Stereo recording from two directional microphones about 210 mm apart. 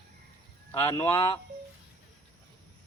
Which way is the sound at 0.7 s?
20° left (ahead or behind).